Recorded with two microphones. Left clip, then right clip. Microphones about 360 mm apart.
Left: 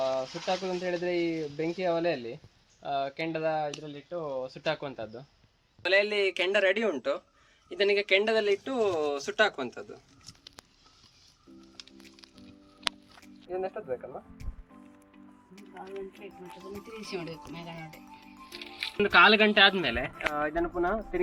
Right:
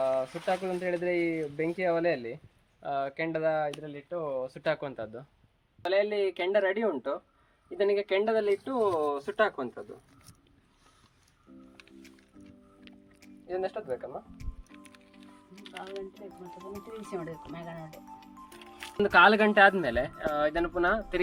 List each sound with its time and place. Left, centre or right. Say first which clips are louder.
0.0 s speech: right 1 dB; centre
13.1 s speech: right 1 dB; centre
16.1 s speech: even; centre
17.7 s music: right 1 dB; centre
19.1 s speech: even; right